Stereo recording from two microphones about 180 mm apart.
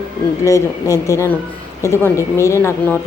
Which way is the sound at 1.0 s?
15° left (ahead or behind).